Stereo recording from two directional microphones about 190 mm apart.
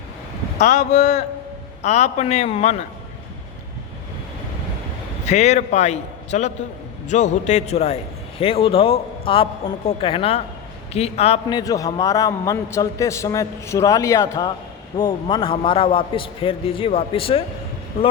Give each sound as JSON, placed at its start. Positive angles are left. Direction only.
{"t": 0.6, "sound": "a man's voice", "side_deg": 40}
{"t": 5.3, "sound": "a man's voice", "side_deg": 35}